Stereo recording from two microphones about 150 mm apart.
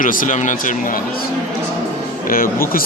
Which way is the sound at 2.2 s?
70° left (ahead or behind).